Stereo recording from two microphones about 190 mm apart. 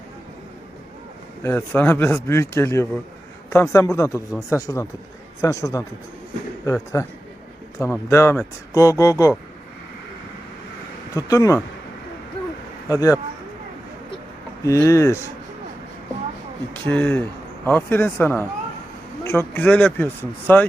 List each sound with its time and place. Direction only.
1.4 s speech: 10° left (ahead or behind)
6.9 s speech: 15° left (ahead or behind)
11.1 s speech: 20° left (ahead or behind)
12.9 s speech: 15° left (ahead or behind)
14.6 s speech: 15° left (ahead or behind)
16.8 s speech: 10° left (ahead or behind)